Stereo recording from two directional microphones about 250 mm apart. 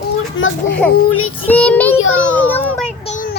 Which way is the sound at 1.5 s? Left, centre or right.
Centre.